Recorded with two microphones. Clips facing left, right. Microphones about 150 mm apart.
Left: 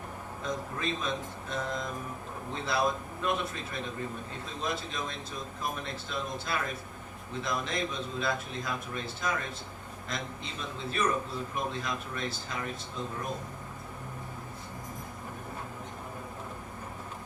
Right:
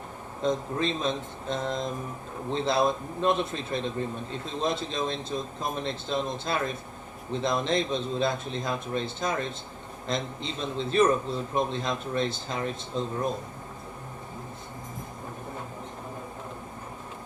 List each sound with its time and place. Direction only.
0.4 s a man's voice: 25° right (ahead or behind)